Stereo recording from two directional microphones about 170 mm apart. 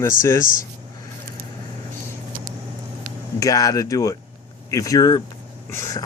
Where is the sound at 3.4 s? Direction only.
20° left (ahead or behind).